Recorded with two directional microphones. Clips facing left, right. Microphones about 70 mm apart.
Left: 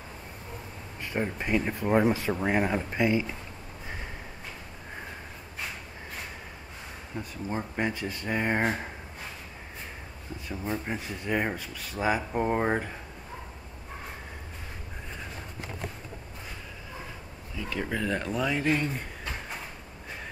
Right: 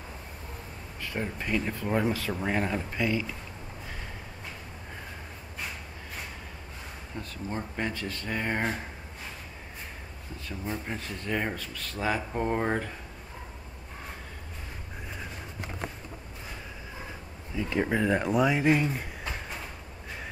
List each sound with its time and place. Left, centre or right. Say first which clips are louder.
1.0 s speech: left 3 dB; centre
7.2 s speech: left 2 dB; centre
10.6 s speech: left 2 dB; centre
17.6 s speech: right 4 dB; right